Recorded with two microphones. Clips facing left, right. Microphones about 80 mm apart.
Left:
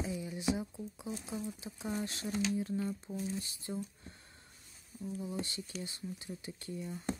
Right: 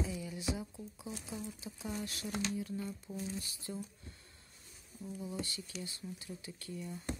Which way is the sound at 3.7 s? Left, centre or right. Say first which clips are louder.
Left 3 dB; left.